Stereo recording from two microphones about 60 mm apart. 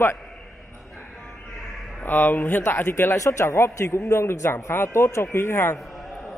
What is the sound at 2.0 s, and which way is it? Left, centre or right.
A man's voice, left.